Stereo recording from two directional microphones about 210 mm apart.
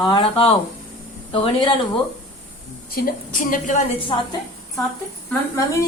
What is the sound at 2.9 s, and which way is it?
Speech, 40° left (ahead or behind).